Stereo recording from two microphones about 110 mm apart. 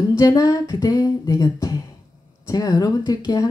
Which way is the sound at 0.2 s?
35° left (ahead or behind).